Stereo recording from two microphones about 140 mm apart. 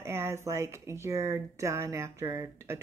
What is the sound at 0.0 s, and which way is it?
Speech, 20° right (ahead or behind).